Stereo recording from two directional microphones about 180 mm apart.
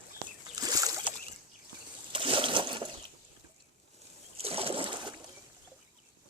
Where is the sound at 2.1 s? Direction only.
30° right (ahead or behind).